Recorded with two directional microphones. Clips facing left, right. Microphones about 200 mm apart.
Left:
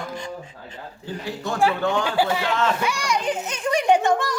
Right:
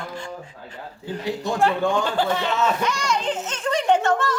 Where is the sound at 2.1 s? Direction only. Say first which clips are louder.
Left 1 dB; 10° left (ahead or behind).